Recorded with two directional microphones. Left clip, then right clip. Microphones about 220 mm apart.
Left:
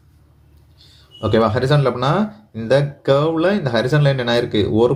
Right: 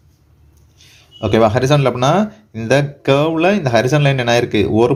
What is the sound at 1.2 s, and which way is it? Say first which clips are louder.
Speech: right 3 dB; 35° right (ahead or behind).